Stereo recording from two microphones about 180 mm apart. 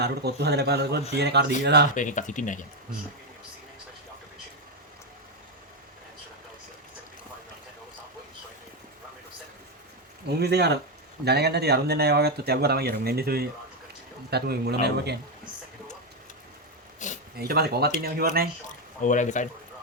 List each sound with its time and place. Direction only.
0.0 s speech: 65° right (ahead or behind)
2.0 s speech: 45° left (ahead or behind)
10.2 s speech: 65° right (ahead or behind)
17.0 s a sound: 40° left (ahead or behind)
17.3 s speech: 60° right (ahead or behind)
19.0 s speech: 45° left (ahead or behind)